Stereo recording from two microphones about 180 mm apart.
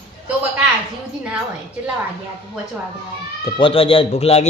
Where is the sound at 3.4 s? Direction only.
30° left (ahead or behind).